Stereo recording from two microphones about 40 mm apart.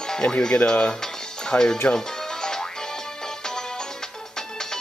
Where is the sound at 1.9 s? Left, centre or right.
Centre.